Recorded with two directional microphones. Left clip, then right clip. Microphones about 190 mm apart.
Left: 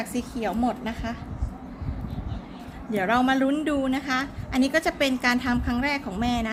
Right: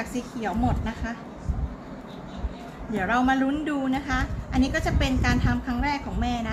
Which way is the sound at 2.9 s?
55° left (ahead or behind).